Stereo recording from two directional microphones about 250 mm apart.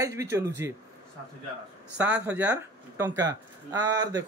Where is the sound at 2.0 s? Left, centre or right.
Centre.